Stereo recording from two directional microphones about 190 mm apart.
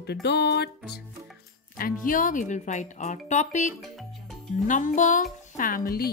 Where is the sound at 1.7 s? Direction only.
45° left (ahead or behind).